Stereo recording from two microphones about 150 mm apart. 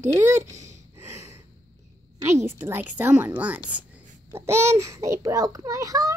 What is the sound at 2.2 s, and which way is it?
A woman's voice, 15° right (ahead or behind).